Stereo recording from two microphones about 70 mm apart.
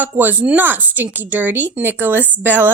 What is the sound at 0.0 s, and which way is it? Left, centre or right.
Speech, right.